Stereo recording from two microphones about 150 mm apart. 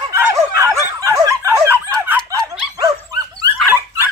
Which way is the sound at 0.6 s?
20° right (ahead or behind).